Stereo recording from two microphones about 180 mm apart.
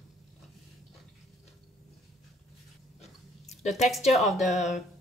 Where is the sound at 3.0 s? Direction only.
40° left (ahead or behind).